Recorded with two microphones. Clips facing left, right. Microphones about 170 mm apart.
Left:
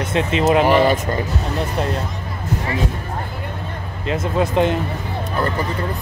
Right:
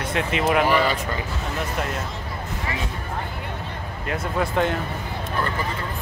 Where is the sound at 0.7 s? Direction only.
45° left (ahead or behind).